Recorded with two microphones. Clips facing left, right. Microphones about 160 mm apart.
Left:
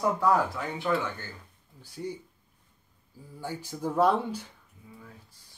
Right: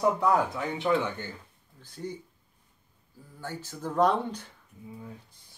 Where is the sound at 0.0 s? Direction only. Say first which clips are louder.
Right 1 dB; 20° right (ahead or behind).